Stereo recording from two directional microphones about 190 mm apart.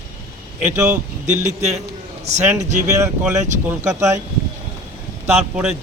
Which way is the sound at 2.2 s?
35° right (ahead or behind).